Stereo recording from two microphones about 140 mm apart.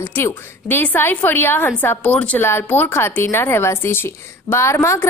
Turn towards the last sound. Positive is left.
turn(degrees=20)  # may be behind; listen again after turning